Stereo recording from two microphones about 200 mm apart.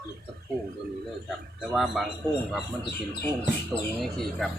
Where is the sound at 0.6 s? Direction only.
50° right (ahead or behind).